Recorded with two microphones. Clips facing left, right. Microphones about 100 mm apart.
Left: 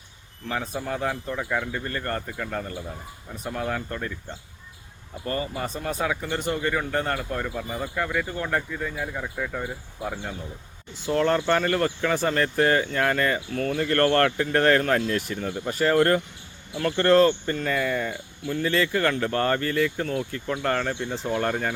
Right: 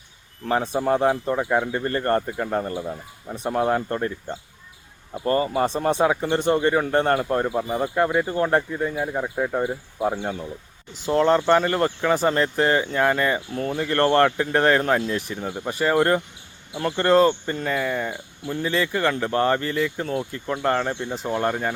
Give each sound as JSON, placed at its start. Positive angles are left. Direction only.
{"t": 0.8, "sound": "speech", "side_deg": -35}